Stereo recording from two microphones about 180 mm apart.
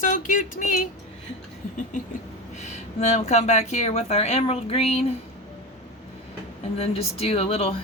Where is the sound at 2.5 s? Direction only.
40° left (ahead or behind).